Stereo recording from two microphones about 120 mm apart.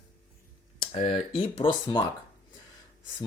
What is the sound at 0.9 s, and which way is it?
Speech, 50° left (ahead or behind).